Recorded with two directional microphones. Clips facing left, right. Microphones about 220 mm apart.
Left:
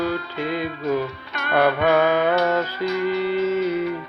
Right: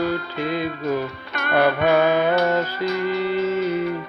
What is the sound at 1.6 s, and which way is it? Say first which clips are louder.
Music: even; 10° right (ahead or behind).